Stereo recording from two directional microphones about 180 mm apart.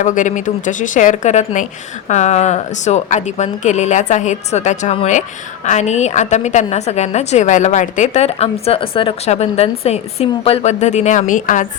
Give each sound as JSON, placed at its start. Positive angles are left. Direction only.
{"t": 0.0, "sound": "a woman's voice", "side_deg": 45}